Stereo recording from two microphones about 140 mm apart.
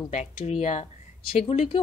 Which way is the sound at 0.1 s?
50° left (ahead or behind).